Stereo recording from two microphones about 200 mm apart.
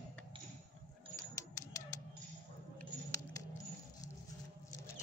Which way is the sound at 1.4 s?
15° left (ahead or behind).